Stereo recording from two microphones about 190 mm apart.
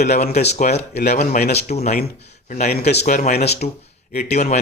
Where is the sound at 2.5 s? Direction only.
50° left (ahead or behind).